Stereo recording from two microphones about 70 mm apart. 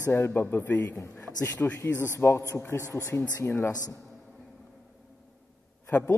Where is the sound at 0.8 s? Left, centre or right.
Left.